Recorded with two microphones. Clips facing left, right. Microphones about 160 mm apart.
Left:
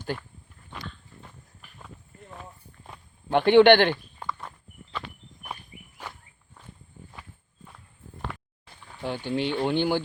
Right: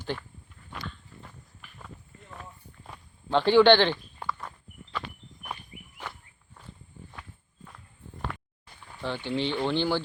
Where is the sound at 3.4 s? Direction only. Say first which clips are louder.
Left 3 dB; 60° left (ahead or behind).